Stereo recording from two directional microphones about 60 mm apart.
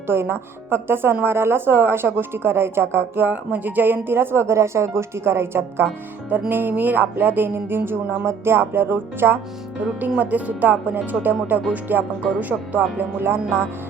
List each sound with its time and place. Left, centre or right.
0.1 s speech: right
6.5 s speech: right
10.2 s speech: right